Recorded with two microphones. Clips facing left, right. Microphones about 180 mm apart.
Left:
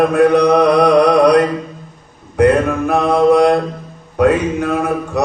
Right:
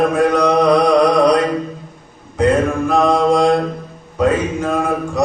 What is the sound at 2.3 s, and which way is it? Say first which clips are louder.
Mantra: left 3 dB; 65° left (ahead or behind).